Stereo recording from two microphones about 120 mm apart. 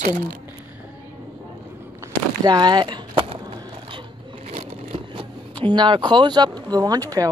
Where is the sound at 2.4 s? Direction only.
35° right (ahead or behind).